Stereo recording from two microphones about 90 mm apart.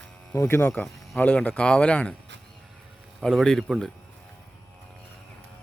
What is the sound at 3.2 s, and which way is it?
Speech, centre (ahead or behind).